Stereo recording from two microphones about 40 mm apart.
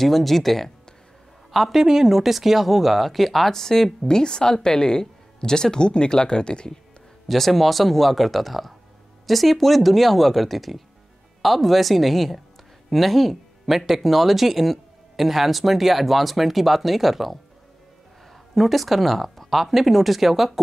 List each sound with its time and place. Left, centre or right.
0.0 s a woman's voice: centre; by 6.7 s left
7.2 s speech: centre
18.5 s speech: centre